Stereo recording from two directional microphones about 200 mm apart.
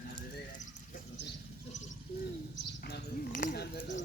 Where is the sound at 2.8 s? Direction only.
45° left (ahead or behind).